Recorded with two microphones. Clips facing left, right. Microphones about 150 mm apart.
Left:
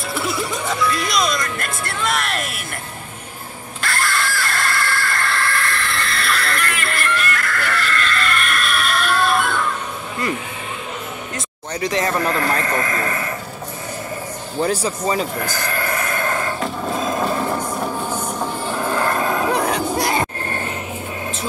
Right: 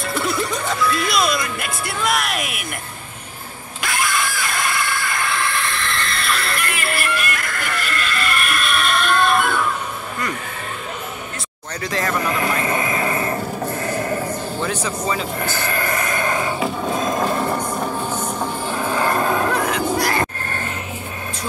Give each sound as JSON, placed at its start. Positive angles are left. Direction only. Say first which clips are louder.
{"t": 0.0, "sound": "music", "louder": "right 1 dB", "side_deg": 0}
{"t": 3.8, "sound": "a sound", "louder": "even", "side_deg": -15}
{"t": 5.7, "sound": "neigh", "louder": "left 1 dB", "side_deg": 5}
{"t": 6.6, "sound": "music", "louder": "even", "side_deg": -10}
{"t": 11.8, "sound": "speech", "louder": "left 2 dB", "side_deg": 20}
{"t": 12.3, "sound": "horse", "louder": "left 1 dB", "side_deg": -10}
{"t": 13.8, "sound": "a sound", "louder": "right 5 dB", "side_deg": -70}
{"t": 14.6, "sound": "speech", "louder": "left 7 dB", "side_deg": 35}
{"t": 15.5, "sound": "a sound", "louder": "right 1 dB", "side_deg": -5}
{"t": 20.0, "sound": "vehicle", "louder": "left 1 dB", "side_deg": 20}